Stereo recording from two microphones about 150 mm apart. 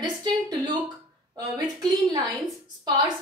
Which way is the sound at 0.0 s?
30° right (ahead or behind).